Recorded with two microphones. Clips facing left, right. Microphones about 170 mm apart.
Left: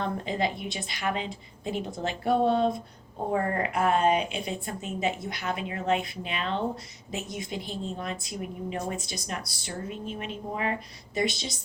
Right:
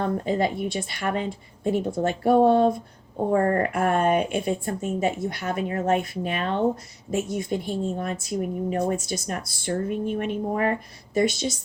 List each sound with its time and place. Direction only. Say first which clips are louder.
0.0 s a woman's voice: right 5 dB; 45° right (ahead or behind)